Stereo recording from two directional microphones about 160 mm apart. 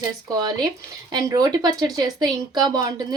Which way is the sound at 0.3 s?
25° right (ahead or behind).